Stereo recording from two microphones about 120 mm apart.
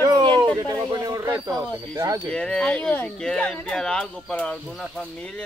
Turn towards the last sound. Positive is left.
turn(degrees=5)  # may be behind; listen again after turning